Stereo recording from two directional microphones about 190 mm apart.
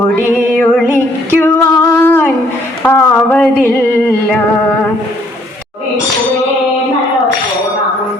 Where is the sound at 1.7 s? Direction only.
20° left (ahead or behind).